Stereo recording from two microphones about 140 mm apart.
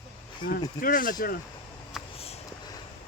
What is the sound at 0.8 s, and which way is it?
Speech, 80° left.